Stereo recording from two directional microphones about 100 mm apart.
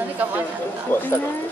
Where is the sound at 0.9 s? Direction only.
20° left (ahead or behind).